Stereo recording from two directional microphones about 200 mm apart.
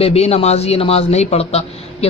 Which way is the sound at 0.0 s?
30° left (ahead or behind).